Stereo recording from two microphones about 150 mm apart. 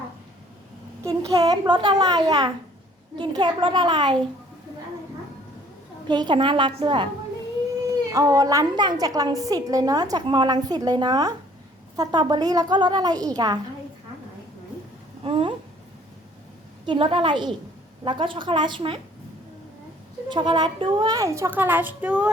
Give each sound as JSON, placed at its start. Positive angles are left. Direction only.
{"t": 1.0, "sound": "a woman's voice", "side_deg": -20}
{"t": 6.1, "sound": "a woman's voice", "side_deg": -30}
{"t": 8.1, "sound": "a woman's voice", "side_deg": -20}
{"t": 15.2, "sound": "speech", "side_deg": -35}
{"t": 16.8, "sound": "a woman's voice", "side_deg": -35}
{"t": 20.3, "sound": "a woman's voice", "side_deg": -30}